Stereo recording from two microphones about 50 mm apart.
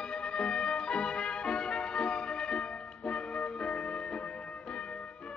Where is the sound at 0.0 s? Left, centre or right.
Centre.